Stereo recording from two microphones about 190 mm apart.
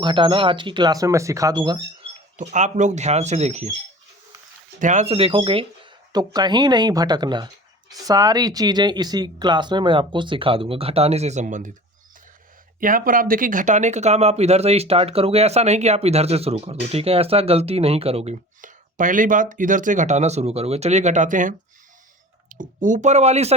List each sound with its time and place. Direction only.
0.0 s speech: 25° right (ahead or behind)
2.3 s speech: 40° right (ahead or behind)
4.8 s speech: 40° right (ahead or behind)
12.8 s speech: 45° right (ahead or behind)